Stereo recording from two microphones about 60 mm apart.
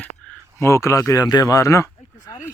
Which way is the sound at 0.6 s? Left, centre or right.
Left.